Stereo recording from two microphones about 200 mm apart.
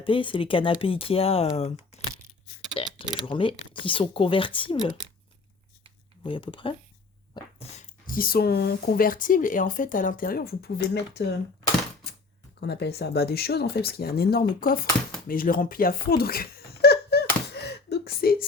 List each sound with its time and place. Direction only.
0.0 s speech: 25° left (ahead or behind)
2.8 s speech: 25° left (ahead or behind)
6.2 s speech: 25° left (ahead or behind); by 11.3 s 55° left (ahead or behind)
12.5 s speech: 55° left (ahead or behind)
15.3 s a sound: 45° left (ahead or behind)